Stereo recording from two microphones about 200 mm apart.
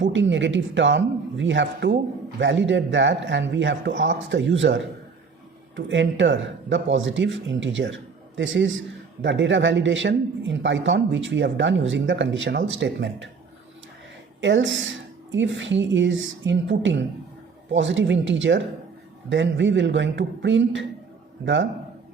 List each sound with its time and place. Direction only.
0.0 s speech: 65° right (ahead or behind)
14.4 s speech: 65° right (ahead or behind)